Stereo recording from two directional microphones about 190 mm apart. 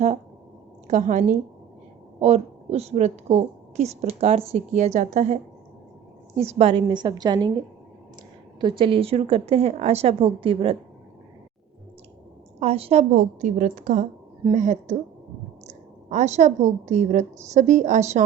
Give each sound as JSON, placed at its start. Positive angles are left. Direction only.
{"t": 0.9, "sound": "a woman's voice", "side_deg": -40}
{"t": 2.2, "sound": "a woman's voice", "side_deg": -35}
{"t": 8.6, "sound": "a woman's voice", "side_deg": -25}
{"t": 12.5, "sound": "a woman's voice", "side_deg": -30}
{"t": 16.0, "sound": "a woman's voice", "side_deg": -35}